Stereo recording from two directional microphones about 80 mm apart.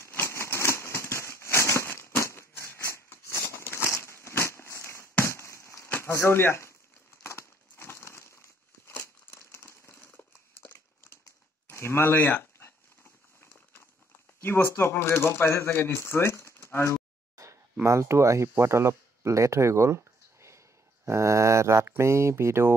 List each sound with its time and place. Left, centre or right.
0.0 s a sound: left
5.9 s speech: left
7.7 s crumpling: left
11.7 s a sound: left
14.4 s speech: left
17.8 s speech: right